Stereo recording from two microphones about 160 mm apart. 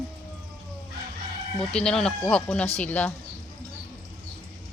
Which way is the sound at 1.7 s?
5° left (ahead or behind).